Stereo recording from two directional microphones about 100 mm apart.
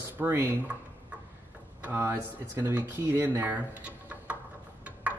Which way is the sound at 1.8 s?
20° right (ahead or behind).